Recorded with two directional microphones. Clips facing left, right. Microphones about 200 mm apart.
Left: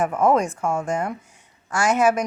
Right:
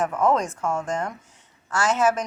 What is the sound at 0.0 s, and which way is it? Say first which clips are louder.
Speech: left 3 dB; 10° left (ahead or behind).